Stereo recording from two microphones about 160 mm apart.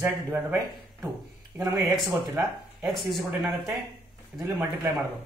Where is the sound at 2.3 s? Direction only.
Centre (ahead or behind).